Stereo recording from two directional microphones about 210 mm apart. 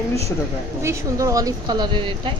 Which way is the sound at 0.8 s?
15° right (ahead or behind).